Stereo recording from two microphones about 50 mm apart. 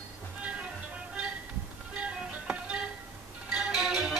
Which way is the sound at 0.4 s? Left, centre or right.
Right.